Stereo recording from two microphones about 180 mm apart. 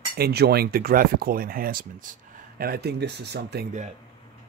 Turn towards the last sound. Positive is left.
turn(degrees=-65)  # may be behind; listen again after turning